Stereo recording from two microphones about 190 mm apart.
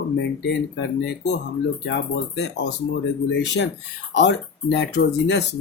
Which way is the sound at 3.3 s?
65° left (ahead or behind).